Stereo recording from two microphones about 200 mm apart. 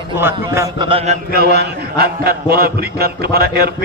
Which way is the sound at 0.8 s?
25° right (ahead or behind).